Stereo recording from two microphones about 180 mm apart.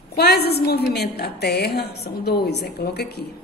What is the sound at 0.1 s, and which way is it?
A woman's voice, 65° left (ahead or behind).